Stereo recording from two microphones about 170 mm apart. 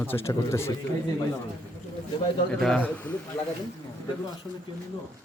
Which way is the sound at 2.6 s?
5° left (ahead or behind).